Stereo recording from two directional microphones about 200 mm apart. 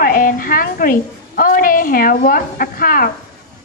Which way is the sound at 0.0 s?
45° left (ahead or behind).